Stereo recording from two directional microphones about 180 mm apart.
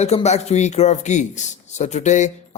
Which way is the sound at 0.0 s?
35° left (ahead or behind).